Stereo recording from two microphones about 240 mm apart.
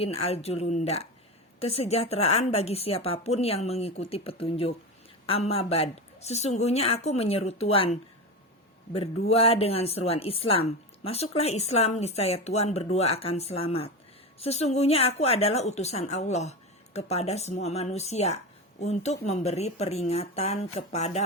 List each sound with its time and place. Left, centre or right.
0.0 s speech: left